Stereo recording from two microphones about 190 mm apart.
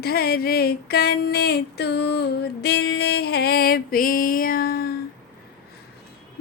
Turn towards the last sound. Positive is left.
turn(degrees=50)  # may be behind; listen again after turning